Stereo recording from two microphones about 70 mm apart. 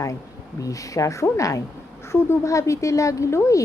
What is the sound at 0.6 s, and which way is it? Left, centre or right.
A woman's voice, left.